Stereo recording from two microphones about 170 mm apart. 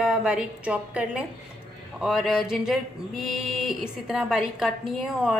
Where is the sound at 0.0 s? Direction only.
5° right (ahead or behind).